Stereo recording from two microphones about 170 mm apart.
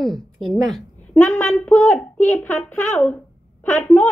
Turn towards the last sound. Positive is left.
turn(degrees=15)  # may be behind; listen again after turning